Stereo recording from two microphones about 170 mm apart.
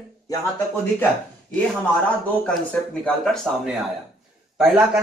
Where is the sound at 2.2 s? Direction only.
5° left (ahead or behind).